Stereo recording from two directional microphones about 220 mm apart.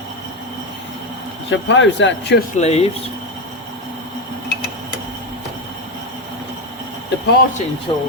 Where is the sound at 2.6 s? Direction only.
30° left (ahead or behind).